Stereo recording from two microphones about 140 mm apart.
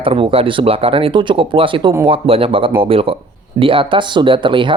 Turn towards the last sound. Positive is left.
turn(degrees=-35)  # may be behind; listen again after turning